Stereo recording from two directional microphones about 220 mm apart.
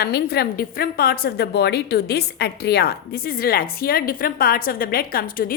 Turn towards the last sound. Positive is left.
turn(degrees=40)  # may be behind; listen again after turning